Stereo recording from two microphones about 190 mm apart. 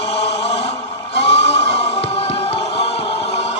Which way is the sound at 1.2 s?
35° left (ahead or behind).